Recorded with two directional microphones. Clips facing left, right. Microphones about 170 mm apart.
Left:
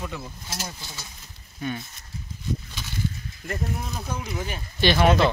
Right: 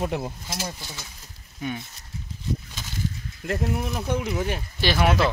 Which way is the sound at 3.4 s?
75° right (ahead or behind).